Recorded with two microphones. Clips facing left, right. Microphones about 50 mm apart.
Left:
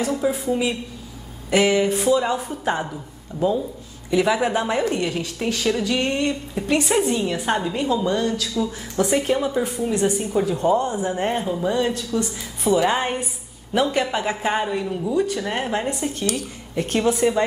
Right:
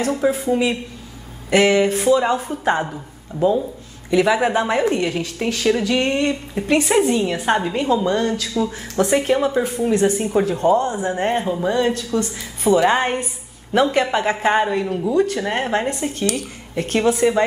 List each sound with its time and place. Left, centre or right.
0.0 s a woman's voice: right
4.1 s a woman's voice: right